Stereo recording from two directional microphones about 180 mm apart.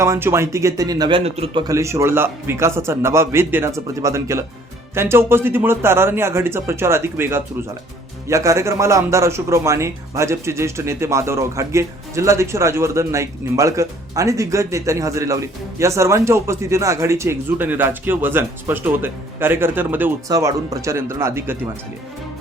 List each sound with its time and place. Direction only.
0.0 s speech: 15° right (ahead or behind)
1.2 s a man's voice: 35° right (ahead or behind)
1.6 s speech: 15° right (ahead or behind)